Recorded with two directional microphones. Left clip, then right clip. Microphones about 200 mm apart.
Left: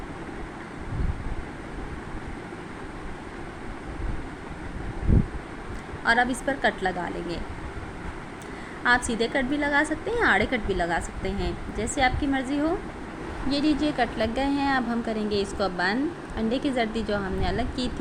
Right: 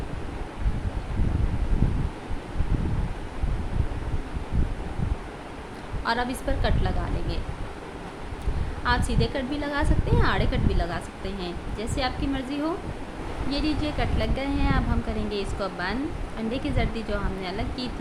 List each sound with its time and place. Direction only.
6.1 s a woman's voice: 10° left (ahead or behind)
8.8 s a woman's voice: 15° left (ahead or behind)